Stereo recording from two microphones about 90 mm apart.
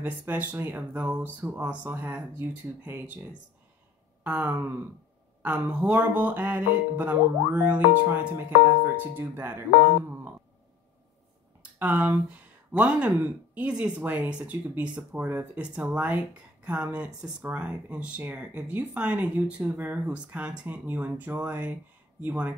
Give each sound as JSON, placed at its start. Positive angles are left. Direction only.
{"t": 0.0, "sound": "speech", "side_deg": -20}
{"t": 4.2, "sound": "a sound", "side_deg": -15}
{"t": 5.4, "sound": "speech", "side_deg": -15}
{"t": 11.8, "sound": "speech", "side_deg": -15}